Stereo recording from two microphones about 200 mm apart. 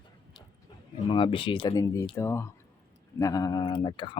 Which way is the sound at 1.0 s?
25° left (ahead or behind).